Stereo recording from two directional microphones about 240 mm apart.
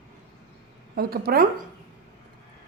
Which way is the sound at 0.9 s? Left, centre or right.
Right.